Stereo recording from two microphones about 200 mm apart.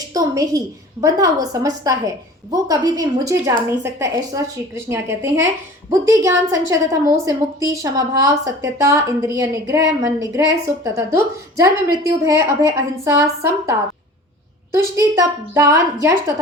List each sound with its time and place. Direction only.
0.1 s a woman's voice: 15° right (ahead or behind)